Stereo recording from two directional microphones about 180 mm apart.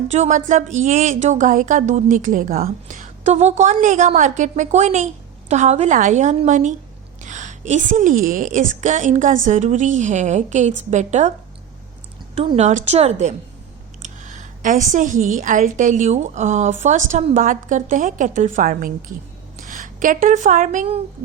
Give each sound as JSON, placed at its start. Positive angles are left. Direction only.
{"t": 0.1, "sound": "speech", "side_deg": -40}
{"t": 12.3, "sound": "a woman's voice", "side_deg": -35}